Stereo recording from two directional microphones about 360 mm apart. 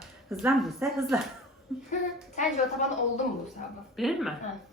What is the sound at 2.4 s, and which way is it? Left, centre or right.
Speech, centre.